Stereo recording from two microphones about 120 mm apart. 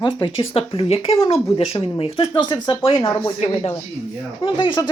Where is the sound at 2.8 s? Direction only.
50° left (ahead or behind).